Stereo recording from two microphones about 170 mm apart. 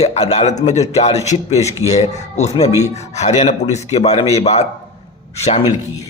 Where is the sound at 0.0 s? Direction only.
40° left (ahead or behind).